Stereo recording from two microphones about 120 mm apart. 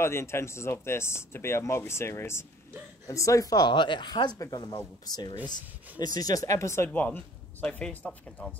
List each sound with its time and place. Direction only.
0.0 s speech: 20° left (ahead or behind)